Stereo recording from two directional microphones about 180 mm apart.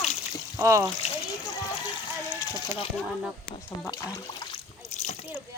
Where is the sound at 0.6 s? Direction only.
15° right (ahead or behind).